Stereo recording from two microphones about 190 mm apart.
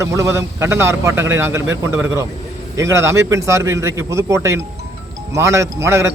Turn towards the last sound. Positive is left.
turn(degrees=-15)  # may be behind; listen again after turning